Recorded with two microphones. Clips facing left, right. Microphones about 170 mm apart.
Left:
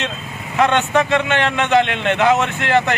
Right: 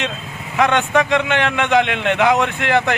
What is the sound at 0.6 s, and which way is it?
Speech, 10° right (ahead or behind).